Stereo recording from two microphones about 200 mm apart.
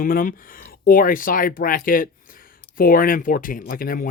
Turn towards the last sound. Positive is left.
turn(degrees=45)  # may be behind; listen again after turning